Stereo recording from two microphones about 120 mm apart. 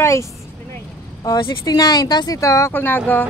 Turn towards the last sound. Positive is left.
turn(degrees=15)  # may be behind; listen again after turning